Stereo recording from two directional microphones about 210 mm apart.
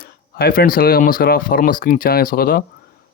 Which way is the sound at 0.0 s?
45° left (ahead or behind).